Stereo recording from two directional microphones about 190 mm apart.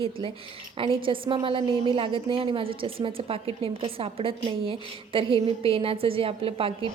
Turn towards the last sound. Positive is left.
turn(degrees=-30)  # may be behind; listen again after turning